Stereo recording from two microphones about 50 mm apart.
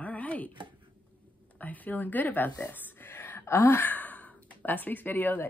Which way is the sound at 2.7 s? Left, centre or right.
Left.